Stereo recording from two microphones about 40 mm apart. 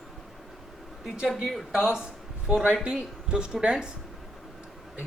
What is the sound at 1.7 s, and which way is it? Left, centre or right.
Speech, centre.